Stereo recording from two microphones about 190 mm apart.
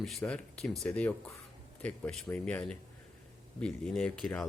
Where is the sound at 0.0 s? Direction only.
Centre (ahead or behind).